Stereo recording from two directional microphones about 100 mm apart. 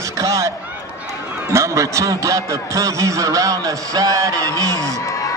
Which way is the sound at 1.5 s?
30° right (ahead or behind).